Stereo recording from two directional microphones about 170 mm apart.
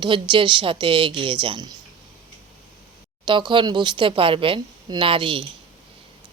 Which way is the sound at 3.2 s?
30° right (ahead or behind).